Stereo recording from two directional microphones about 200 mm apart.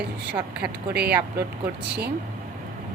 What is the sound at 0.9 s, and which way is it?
Speech, 55° right (ahead or behind).